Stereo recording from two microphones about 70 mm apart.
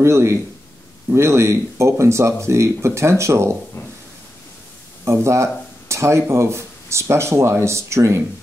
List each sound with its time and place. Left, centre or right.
0.0 s speech: right
5.0 s speech: right